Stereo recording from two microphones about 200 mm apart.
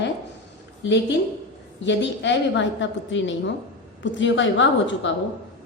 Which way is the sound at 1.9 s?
65° left (ahead or behind).